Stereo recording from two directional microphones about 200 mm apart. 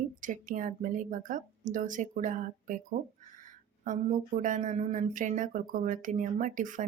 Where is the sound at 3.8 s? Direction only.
40° right (ahead or behind).